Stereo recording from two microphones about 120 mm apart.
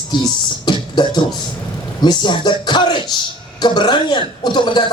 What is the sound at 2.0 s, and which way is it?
A man's voice, 40° left (ahead or behind).